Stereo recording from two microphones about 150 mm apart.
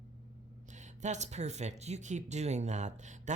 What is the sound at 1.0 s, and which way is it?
Speech, 50° right (ahead or behind).